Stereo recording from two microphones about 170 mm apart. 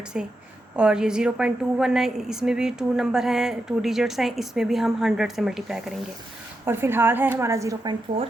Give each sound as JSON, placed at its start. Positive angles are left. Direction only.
{"t": 0.1, "sound": "a woman's voice", "side_deg": -5}
{"t": 6.7, "sound": "a woman's voice", "side_deg": -15}